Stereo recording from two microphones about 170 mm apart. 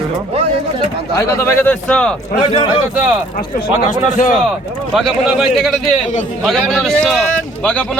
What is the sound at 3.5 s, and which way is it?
Speech, 45° left (ahead or behind).